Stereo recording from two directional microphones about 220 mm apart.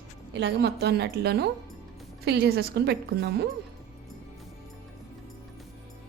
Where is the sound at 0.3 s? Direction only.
50° right (ahead or behind).